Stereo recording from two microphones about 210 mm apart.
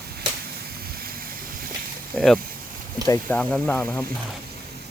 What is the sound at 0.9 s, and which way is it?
Vehicle, 45° right (ahead or behind).